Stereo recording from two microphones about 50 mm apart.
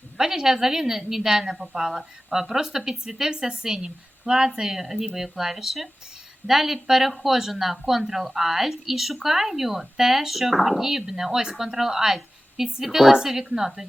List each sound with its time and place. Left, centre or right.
0.2 s a woman's voice: centre